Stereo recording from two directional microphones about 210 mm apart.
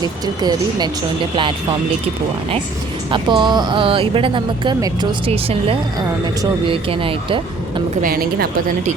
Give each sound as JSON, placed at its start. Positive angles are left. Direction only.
{"t": 0.0, "sound": "speech", "side_deg": -20}
{"t": 3.1, "sound": "speech", "side_deg": -20}
{"t": 8.0, "sound": "a woman's voice", "side_deg": -45}